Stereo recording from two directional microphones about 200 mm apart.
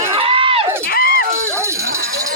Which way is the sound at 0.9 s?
50° left (ahead or behind).